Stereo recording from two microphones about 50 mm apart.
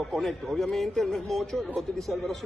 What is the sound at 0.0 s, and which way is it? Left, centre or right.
A man's voice, centre.